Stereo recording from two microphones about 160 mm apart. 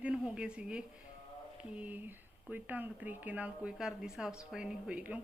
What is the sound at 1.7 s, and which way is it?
A woman's voice, 10° right (ahead or behind).